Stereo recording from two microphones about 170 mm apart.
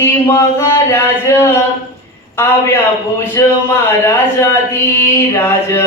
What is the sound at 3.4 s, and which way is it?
Speech, 15° left (ahead or behind).